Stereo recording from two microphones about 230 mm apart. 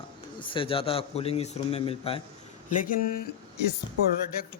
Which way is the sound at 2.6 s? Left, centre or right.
Left.